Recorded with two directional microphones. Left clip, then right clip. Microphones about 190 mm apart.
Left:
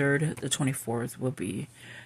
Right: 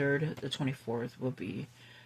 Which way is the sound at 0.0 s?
40° left (ahead or behind).